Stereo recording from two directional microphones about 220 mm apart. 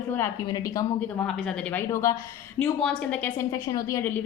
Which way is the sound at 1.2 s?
5° left (ahead or behind).